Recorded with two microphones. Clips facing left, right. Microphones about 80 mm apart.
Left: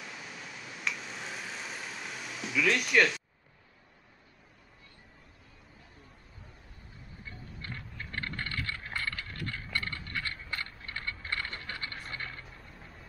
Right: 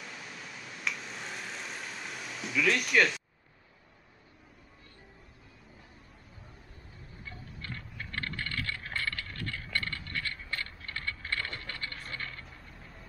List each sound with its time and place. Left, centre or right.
0.0 s vehicle: centre
7.7 s bicycle: centre
11.5 s a sound: centre